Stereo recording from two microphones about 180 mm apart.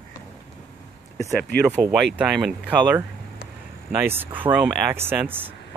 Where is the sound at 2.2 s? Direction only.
5° right (ahead or behind).